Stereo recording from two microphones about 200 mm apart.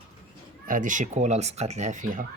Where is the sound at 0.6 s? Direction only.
40° right (ahead or behind).